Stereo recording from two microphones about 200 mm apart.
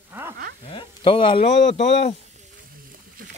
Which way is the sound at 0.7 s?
25° left (ahead or behind).